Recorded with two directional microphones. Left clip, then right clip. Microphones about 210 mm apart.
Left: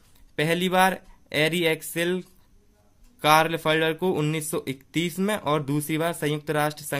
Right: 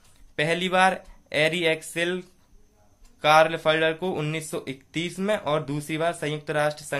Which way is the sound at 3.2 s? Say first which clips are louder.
Right 1 dB; 35° left (ahead or behind).